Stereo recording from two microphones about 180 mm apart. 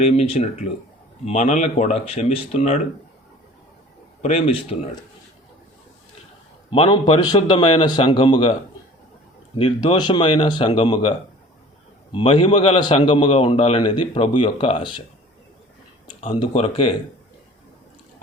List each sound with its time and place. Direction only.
0.0 s speech: 35° left (ahead or behind)
4.2 s speech: 35° left (ahead or behind)
6.7 s a man's voice: 30° left (ahead or behind)
9.6 s a man's voice: 25° left (ahead or behind)
12.1 s a man's voice: 30° left (ahead or behind)
16.2 s a man's voice: 30° left (ahead or behind)